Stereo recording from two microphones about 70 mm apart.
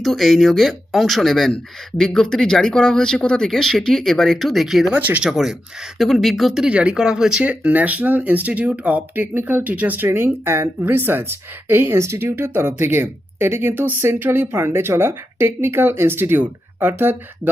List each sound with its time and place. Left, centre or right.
0.0 s speech: centre
4.9 s speech: right
5.2 s speech: centre
7.4 s speech: right